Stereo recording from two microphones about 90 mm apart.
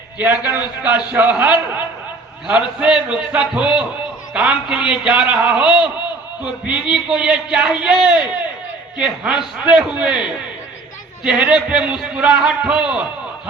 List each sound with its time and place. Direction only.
0.2 s a man's voice: 20° right (ahead or behind)
6.9 s a man's voice: 10° right (ahead or behind)